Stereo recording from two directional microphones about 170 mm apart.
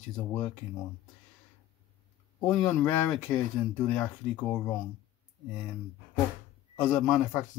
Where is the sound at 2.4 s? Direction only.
5° left (ahead or behind).